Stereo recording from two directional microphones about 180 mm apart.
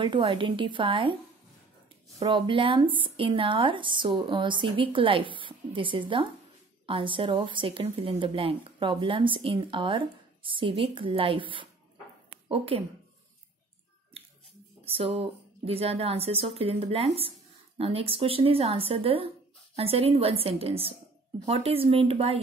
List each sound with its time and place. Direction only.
0.0 s speech: 25° right (ahead or behind)
2.1 s speech: 25° right (ahead or behind)
14.9 s speech: 30° right (ahead or behind)